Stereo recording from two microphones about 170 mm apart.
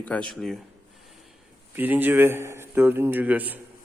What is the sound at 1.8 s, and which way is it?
A man's voice, 10° right (ahead or behind).